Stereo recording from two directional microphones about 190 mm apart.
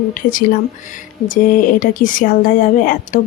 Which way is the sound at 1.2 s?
45° left (ahead or behind).